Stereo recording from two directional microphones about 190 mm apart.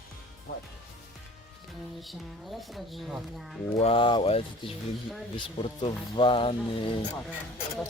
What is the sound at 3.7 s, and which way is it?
Speech, 30° left (ahead or behind).